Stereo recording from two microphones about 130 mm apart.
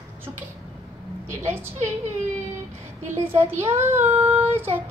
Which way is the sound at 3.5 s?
20° right (ahead or behind).